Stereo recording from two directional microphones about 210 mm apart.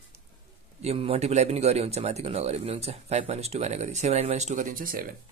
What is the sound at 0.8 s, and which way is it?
Speech, 30° right (ahead or behind).